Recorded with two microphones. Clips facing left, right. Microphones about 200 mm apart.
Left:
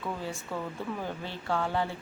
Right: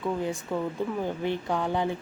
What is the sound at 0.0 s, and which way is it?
Speech, 15° right (ahead or behind).